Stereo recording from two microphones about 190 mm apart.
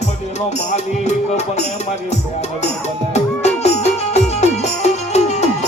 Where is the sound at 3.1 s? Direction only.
35° left (ahead or behind).